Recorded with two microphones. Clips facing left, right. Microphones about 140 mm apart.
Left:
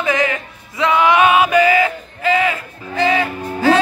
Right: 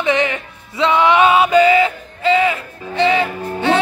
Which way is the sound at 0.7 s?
25° right (ahead or behind).